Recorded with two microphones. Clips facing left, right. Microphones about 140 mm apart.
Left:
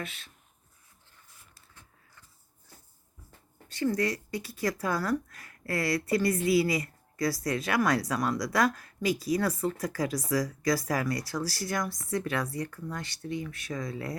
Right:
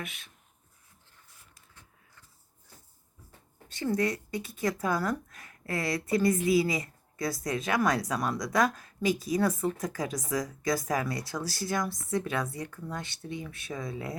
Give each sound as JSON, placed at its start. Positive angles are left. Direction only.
{"t": 0.0, "sound": "speech", "side_deg": -15}
{"t": 3.7, "sound": "speech", "side_deg": -25}